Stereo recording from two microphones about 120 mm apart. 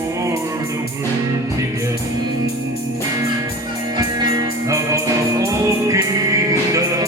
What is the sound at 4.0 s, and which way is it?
Music, 30° right (ahead or behind).